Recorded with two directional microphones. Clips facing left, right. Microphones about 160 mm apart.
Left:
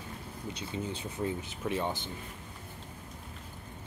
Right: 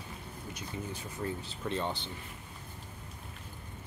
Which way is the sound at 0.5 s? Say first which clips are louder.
Left 4 dB; 20° left (ahead or behind).